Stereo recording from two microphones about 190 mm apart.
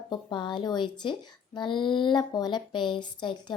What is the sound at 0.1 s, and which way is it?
Speech, 25° left (ahead or behind).